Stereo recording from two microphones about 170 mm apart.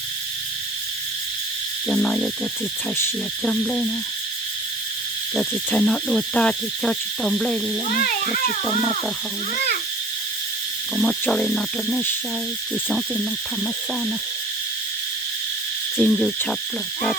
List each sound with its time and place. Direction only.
1.9 s hoot: 5° left (ahead or behind)
3.0 s owl: 5° left (ahead or behind)
5.3 s owl: 5° left (ahead or behind)
7.9 s speech: 55° left (ahead or behind)
10.9 s owl: 5° left (ahead or behind)
16.0 s hoot: 5° left (ahead or behind)